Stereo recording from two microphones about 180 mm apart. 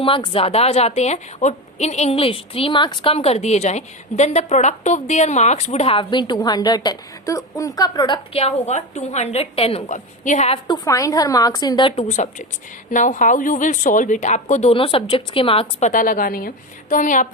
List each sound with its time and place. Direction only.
0.0 s a woman's voice: 30° left (ahead or behind)
10.7 s a woman's voice: 20° left (ahead or behind)
15.9 s a woman's voice: 50° left (ahead or behind)